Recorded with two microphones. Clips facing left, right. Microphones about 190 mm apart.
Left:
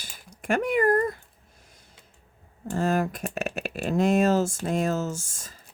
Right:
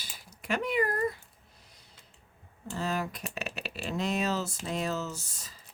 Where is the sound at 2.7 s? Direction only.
50° left (ahead or behind).